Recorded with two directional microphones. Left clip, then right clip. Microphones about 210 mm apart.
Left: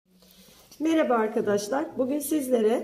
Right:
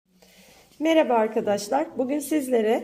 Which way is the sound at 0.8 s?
40° right (ahead or behind).